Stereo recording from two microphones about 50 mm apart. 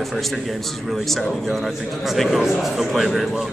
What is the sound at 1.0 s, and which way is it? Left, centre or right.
A man's voice, centre.